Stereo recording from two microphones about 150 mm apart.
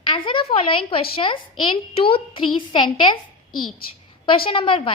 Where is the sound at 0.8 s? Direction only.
35° left (ahead or behind).